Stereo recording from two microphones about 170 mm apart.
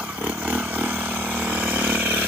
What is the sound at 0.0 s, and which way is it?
Vehicle, 10° right (ahead or behind).